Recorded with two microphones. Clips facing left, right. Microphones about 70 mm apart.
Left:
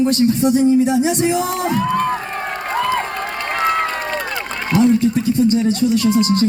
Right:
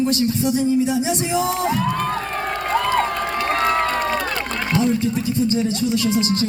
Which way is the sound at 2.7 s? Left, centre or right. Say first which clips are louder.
Even; centre.